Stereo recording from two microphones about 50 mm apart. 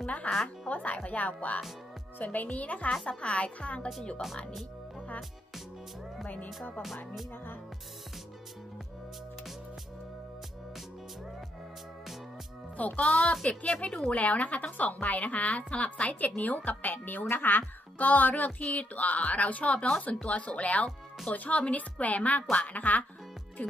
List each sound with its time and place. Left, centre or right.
0.0 s music: left
0.7 s a woman's voice: left
6.2 s a woman's voice: left
12.7 s a woman's voice: left